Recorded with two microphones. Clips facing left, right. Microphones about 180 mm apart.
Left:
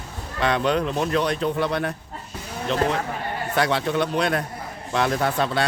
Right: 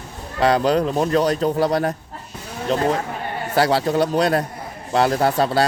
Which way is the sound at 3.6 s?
35° right (ahead or behind).